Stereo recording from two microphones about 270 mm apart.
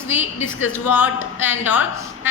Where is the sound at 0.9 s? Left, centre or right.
Centre.